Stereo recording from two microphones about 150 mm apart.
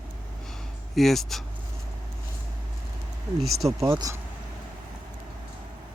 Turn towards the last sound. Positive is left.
turn(degrees=-20)  # may be behind; listen again after turning